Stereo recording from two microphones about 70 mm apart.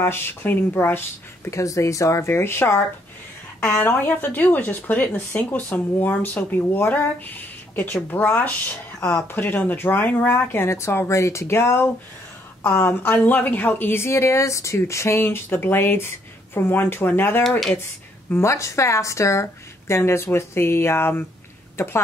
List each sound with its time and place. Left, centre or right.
0.0 s speech: left
1.5 s speech: left
3.6 s speech: left
17.4 s speech: centre
18.3 s speech: left